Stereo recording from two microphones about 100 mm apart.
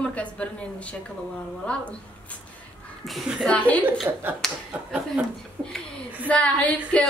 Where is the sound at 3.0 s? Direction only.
Centre (ahead or behind).